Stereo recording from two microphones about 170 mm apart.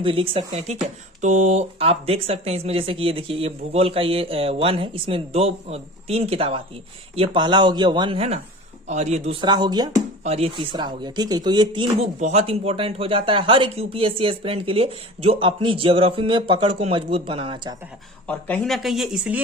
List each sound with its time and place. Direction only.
0.0 s speech: 30° right (ahead or behind)
9.4 s speech: 25° right (ahead or behind)
10.2 s speech: 35° right (ahead or behind)
12.2 s speech: 40° right (ahead or behind)
18.3 s speech: 10° left (ahead or behind)